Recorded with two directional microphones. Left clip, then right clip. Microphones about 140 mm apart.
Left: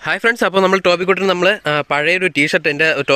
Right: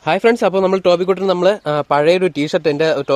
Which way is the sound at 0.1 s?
Centre (ahead or behind).